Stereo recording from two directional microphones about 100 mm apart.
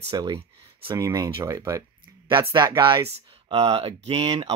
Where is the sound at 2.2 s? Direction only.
50° right (ahead or behind).